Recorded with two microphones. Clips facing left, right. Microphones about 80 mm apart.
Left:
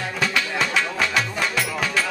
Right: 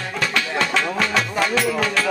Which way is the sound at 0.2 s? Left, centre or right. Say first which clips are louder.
Right 2 dB; centre.